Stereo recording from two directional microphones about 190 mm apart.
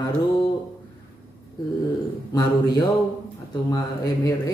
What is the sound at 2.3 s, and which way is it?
Speech, 20° left (ahead or behind).